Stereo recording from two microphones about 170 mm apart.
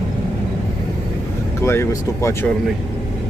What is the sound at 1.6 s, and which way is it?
Speech, 15° left (ahead or behind).